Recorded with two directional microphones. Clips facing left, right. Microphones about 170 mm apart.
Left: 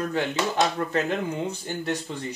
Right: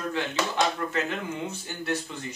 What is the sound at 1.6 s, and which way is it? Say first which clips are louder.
Speech: left 2 dB; 20° left (ahead or behind).